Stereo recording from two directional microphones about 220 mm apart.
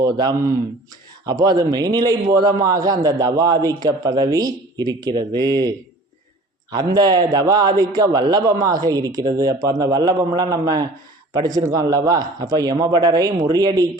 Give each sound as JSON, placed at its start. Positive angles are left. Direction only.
{"t": 0.0, "sound": "a man's voice", "side_deg": -20}